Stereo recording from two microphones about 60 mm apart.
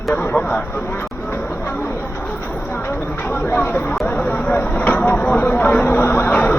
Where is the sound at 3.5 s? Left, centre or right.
Left.